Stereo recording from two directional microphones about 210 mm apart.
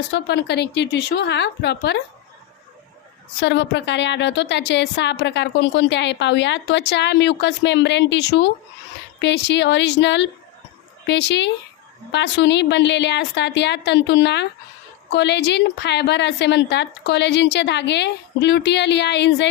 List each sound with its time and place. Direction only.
0.1 s a woman's voice: 55° left (ahead or behind)
3.4 s a woman's voice: 55° left (ahead or behind)